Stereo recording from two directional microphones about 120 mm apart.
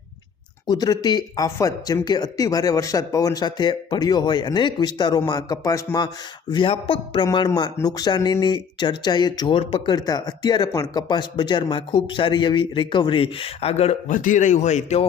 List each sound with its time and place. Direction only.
0.7 s speech: 35° left (ahead or behind)
2.0 s speech: 35° left (ahead or behind)
6.5 s speech: 45° left (ahead or behind); by 15.0 s 70° left (ahead or behind)